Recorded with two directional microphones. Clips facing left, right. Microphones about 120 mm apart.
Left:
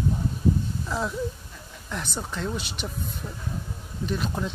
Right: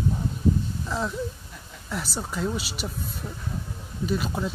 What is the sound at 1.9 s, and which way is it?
Speech, 5° right (ahead or behind).